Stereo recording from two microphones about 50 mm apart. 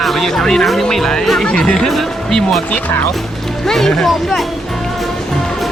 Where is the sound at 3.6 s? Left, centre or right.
Centre.